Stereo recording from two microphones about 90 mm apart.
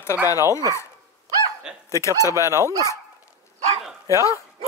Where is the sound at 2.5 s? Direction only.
35° right (ahead or behind).